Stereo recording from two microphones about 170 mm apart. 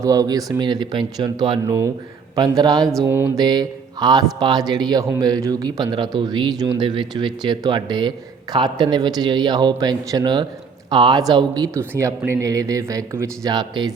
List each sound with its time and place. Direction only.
0.0 s speech: 20° right (ahead or behind)